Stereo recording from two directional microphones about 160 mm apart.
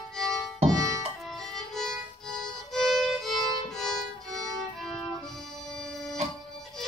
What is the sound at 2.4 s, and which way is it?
Violin, centre (ahead or behind).